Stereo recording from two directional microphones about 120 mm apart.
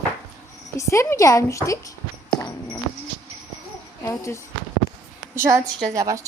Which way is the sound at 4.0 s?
25° left (ahead or behind).